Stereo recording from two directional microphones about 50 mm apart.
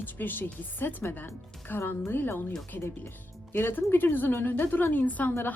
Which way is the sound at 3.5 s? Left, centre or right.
Left.